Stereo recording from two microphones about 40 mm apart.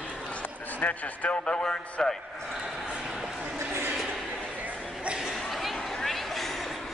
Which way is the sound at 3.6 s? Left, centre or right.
Right.